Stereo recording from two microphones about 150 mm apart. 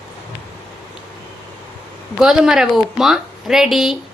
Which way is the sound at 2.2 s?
5° right (ahead or behind).